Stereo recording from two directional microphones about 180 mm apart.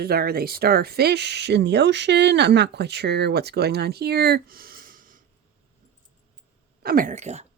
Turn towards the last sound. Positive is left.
turn(degrees=-40)  # may be behind; listen again after turning